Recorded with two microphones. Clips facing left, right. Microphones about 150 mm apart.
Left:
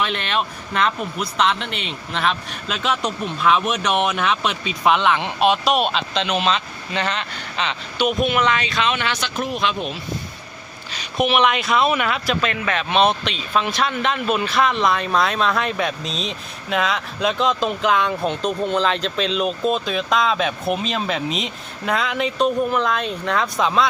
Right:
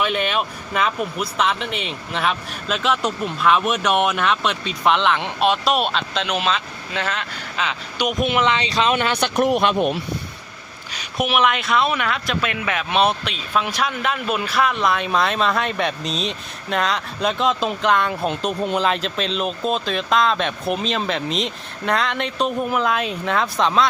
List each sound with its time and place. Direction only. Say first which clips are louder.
0.0 s speech: right 2 dB; 5° right (ahead or behind)
8.3 s speech: even; 20° right (ahead or behind)
8.7 s speech: right 3 dB; 40° right (ahead or behind)
9.3 s speech: right 9 dB; 65° right (ahead or behind)
10.9 s speech: left 2 dB; 5° right (ahead or behind)
12.5 s speech: left 1 dB; 10° right (ahead or behind)